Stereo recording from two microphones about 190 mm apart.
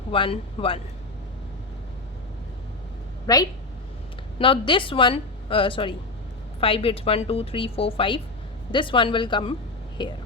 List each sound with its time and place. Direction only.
0.1 s a woman's voice: 30° left (ahead or behind)
3.3 s a woman's voice: 20° left (ahead or behind)